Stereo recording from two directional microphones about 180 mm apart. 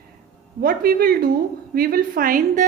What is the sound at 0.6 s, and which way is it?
A woman's voice, 55° right (ahead or behind).